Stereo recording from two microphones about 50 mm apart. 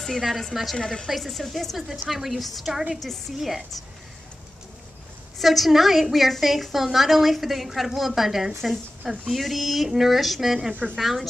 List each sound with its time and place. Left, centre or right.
0.0 s a woman's voice: centre
5.4 s a woman's voice: centre